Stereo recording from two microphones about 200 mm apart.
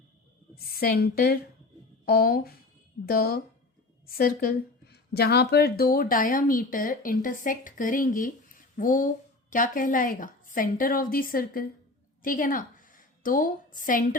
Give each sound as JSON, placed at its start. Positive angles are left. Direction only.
{"t": 0.5, "sound": "a woman's voice", "side_deg": 50}